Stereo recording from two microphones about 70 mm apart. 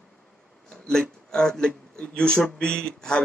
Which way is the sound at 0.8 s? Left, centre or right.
Centre.